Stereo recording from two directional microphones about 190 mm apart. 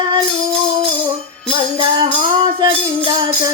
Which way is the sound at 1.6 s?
25° right (ahead or behind).